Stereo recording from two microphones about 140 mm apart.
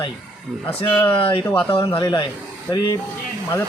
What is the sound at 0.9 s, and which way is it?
Speech, 15° left (ahead or behind).